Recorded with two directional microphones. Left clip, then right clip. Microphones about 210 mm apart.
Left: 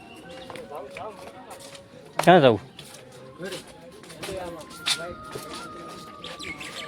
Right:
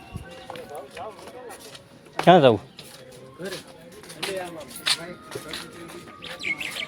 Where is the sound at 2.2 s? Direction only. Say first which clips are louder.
Right 1 dB; 5° right (ahead or behind).